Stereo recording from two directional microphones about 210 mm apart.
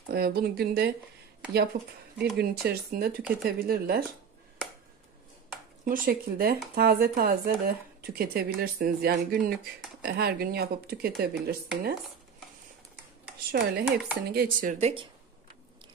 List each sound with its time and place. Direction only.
0.1 s speech: 45° right (ahead or behind)
5.9 s speech: 40° right (ahead or behind)
13.5 s speech: 45° right (ahead or behind); by 15.0 s 30° right (ahead or behind)